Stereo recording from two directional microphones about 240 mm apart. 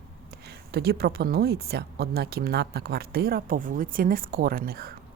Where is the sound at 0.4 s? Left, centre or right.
Right.